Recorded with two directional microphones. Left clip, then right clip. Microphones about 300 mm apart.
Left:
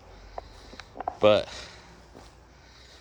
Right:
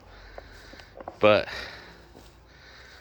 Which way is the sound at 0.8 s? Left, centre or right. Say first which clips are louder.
Even; centre.